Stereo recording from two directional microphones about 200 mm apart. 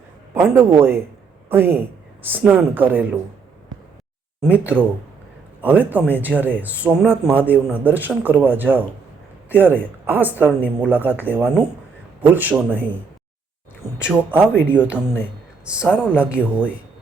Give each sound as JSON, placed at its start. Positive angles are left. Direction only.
{"t": 0.3, "sound": "speech", "side_deg": -10}
{"t": 4.5, "sound": "speech", "side_deg": -10}
{"t": 14.0, "sound": "speech", "side_deg": -5}